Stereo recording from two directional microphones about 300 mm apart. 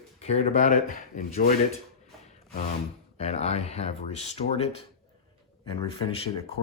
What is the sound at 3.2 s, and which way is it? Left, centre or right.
Speech, left.